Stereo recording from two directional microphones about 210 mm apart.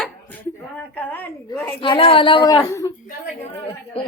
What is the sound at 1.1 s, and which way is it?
Speech, 10° left (ahead or behind).